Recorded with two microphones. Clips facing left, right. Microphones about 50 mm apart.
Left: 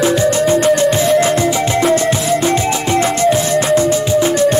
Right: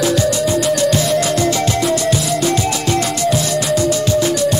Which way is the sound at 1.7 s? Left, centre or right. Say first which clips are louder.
Left 3 dB; left.